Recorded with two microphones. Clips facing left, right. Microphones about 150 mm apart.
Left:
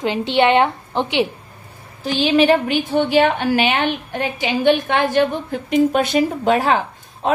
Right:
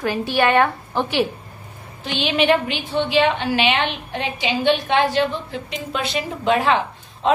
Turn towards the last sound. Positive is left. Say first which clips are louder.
# right 1 dB
turn(degrees=45)  # may be behind; listen again after turning